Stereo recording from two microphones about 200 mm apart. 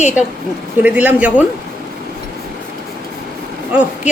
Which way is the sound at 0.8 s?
5° right (ahead or behind).